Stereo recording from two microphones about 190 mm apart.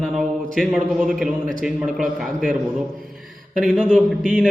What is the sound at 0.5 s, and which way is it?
Mantra, centre (ahead or behind).